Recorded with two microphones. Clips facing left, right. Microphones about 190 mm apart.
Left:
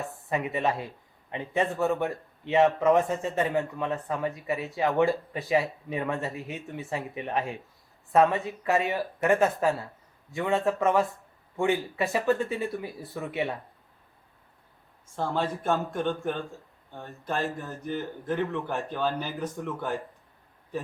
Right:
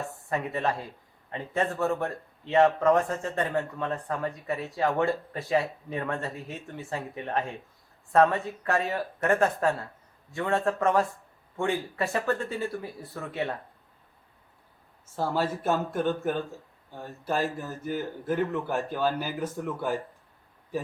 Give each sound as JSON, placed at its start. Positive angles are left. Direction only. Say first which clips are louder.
{"t": 0.1, "sound": "a man's voice", "louder": "left 1 dB", "side_deg": 0}
{"t": 13.1, "sound": "speech", "louder": "left 1 dB", "side_deg": 15}
{"t": 15.0, "sound": "a man's voice", "louder": "right 1 dB", "side_deg": -5}